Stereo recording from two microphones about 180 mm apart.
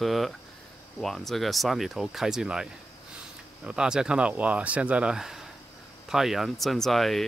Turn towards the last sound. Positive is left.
turn(degrees=0)  # may be behind; listen again after turning